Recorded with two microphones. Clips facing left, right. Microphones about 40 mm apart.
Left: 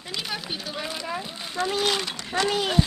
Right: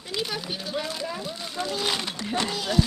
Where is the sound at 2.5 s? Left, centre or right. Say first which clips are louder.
Left 4 dB; left.